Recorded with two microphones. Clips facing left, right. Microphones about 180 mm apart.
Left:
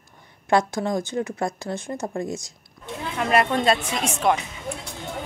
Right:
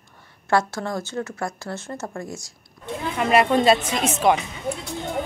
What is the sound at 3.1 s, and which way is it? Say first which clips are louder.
Speech: right 3 dB; 5° right (ahead or behind).